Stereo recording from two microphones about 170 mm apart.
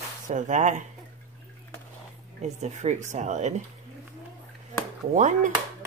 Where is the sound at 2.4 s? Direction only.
40° right (ahead or behind).